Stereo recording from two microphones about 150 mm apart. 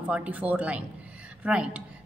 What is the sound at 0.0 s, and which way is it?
A woman's voice, 10° right (ahead or behind).